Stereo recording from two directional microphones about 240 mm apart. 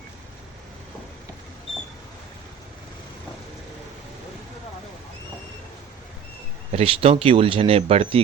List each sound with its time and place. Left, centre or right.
6.7 s speech: right